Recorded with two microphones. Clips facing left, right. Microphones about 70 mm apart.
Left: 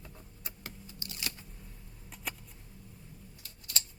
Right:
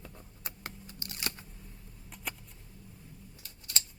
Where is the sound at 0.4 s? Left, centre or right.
Right.